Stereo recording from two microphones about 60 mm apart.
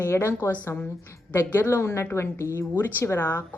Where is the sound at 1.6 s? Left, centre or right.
Left.